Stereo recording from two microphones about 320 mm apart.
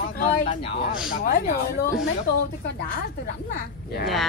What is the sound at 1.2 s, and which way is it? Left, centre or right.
Speech, left.